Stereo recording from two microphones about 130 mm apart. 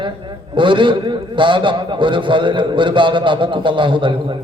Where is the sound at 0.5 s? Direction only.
40° right (ahead or behind).